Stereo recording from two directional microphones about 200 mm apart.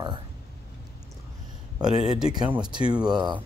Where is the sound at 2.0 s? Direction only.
5° right (ahead or behind).